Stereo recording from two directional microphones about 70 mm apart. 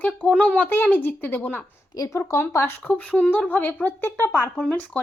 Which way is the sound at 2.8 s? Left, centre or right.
Left.